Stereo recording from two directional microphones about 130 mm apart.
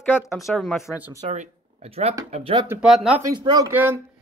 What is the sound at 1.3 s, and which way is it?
Speech, 65° right (ahead or behind).